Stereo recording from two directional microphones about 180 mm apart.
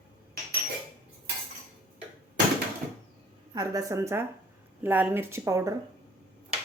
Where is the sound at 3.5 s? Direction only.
20° right (ahead or behind).